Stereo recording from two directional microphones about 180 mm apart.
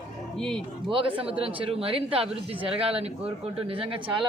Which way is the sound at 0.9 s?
30° right (ahead or behind).